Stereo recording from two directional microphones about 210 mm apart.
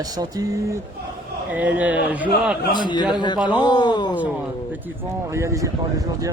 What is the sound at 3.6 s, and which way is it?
Speech, 20° left (ahead or behind).